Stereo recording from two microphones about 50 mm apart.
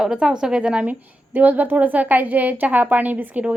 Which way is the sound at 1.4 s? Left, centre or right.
Right.